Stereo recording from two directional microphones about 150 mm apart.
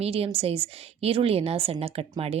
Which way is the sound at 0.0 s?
40° right (ahead or behind).